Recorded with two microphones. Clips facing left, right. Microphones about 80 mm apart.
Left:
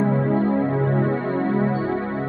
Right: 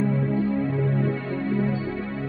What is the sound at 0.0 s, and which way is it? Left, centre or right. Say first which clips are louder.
Music: left 4 dB; left.